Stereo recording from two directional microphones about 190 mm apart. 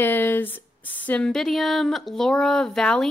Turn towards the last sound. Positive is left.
turn(degrees=5)  # may be behind; listen again after turning